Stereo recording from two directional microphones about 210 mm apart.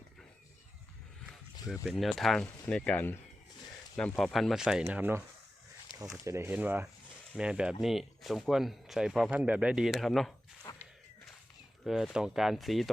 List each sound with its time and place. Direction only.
1.3 s speech: centre (ahead or behind)
5.9 s a sound: 20° left (ahead or behind)
6.2 s speech: 10° right (ahead or behind)
10.7 s walk: 20° left (ahead or behind)
11.9 s speech: centre (ahead or behind)